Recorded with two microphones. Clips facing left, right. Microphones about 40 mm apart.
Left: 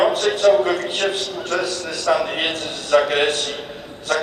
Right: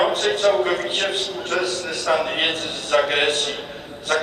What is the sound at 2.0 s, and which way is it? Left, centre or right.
A man's voice, right.